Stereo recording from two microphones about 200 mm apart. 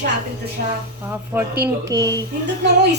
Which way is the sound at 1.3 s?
10° right (ahead or behind).